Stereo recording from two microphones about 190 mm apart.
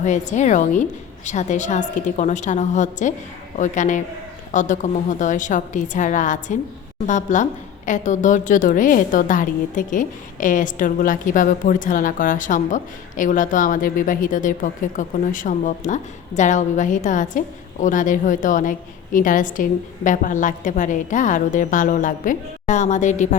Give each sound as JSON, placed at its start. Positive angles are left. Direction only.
{"t": 0.0, "sound": "a woman's voice", "side_deg": 40}